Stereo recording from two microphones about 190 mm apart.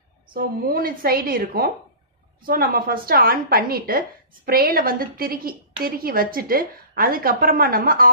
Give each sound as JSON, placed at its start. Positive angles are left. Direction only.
{"t": 0.3, "sound": "a woman's voice", "side_deg": -50}